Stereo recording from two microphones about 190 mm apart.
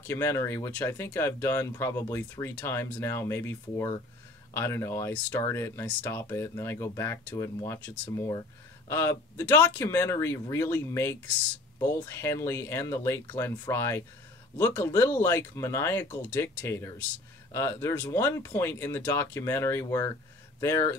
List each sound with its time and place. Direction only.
0.0 s speech: 15° left (ahead or behind)